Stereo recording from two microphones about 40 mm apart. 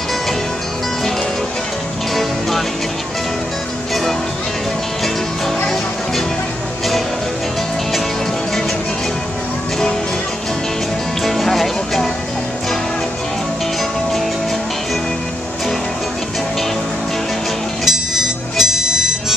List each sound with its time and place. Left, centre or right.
11.2 s music: centre
17.8 s music: centre